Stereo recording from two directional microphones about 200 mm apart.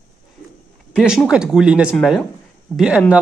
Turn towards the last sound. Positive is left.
turn(degrees=-5)  # may be behind; listen again after turning